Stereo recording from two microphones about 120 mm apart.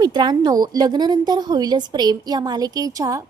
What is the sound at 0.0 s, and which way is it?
A woman's voice, 40° right (ahead or behind).